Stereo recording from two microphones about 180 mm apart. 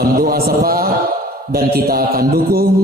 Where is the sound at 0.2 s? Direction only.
55° right (ahead or behind).